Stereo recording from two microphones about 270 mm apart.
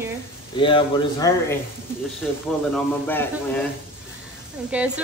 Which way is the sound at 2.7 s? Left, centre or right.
Centre.